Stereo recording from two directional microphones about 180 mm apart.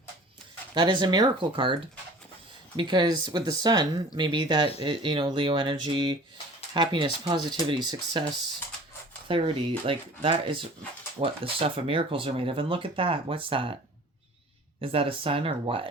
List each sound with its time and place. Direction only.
0.7 s speech: 25° right (ahead or behind)
9.2 s speech: 30° right (ahead or behind)
14.8 s speech: 30° right (ahead or behind)